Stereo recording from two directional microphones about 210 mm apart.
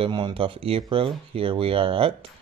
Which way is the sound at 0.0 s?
25° right (ahead or behind).